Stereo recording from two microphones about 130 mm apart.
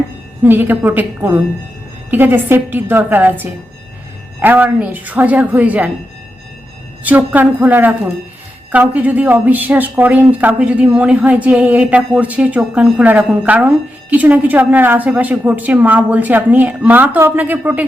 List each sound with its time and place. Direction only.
0.4 s a woman's voice: 15° right (ahead or behind)
7.0 s a woman's voice: 10° right (ahead or behind)